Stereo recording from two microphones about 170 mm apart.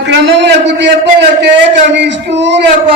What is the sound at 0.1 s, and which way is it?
A man's voice, 85° right.